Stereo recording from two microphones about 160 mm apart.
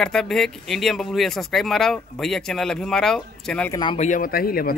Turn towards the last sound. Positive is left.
turn(degrees=65)  # may be behind; listen again after turning